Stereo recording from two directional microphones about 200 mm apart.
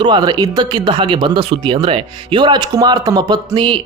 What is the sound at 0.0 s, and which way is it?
Speech, 20° right (ahead or behind).